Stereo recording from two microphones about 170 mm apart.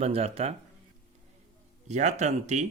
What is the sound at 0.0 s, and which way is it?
Speech, 35° right (ahead or behind).